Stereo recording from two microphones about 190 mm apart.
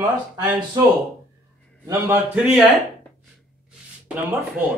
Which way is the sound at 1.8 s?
15° right (ahead or behind).